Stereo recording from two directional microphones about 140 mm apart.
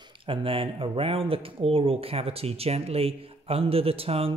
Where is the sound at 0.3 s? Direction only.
40° right (ahead or behind).